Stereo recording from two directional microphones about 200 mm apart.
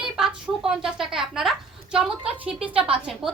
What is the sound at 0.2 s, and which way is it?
A woman's voice, 5° right (ahead or behind).